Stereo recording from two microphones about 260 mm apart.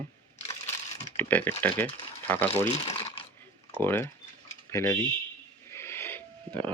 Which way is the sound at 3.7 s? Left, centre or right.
Centre.